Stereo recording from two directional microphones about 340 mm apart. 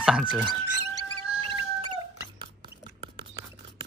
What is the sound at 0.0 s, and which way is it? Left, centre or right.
Speech, centre.